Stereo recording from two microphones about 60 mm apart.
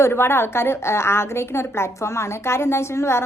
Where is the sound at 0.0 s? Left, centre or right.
Left.